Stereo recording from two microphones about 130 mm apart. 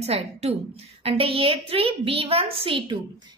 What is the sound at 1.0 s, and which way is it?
A woman's voice, 45° right (ahead or behind).